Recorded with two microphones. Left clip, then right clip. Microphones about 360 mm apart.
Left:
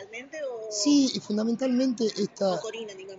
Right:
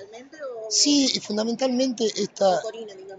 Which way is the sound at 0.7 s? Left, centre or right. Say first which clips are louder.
Right 4 dB; right.